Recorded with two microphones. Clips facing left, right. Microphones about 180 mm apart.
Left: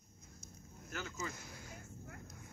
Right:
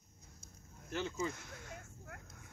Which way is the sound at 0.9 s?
30° right (ahead or behind).